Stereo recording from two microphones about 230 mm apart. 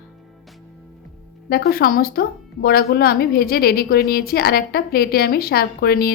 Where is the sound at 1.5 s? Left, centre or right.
Left.